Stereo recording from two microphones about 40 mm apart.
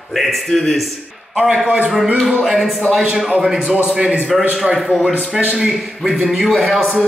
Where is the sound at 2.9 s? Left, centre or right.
Centre.